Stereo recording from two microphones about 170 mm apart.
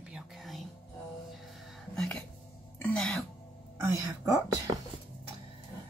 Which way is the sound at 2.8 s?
5° left (ahead or behind).